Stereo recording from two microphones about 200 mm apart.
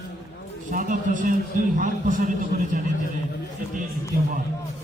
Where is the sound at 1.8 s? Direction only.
40° right (ahead or behind).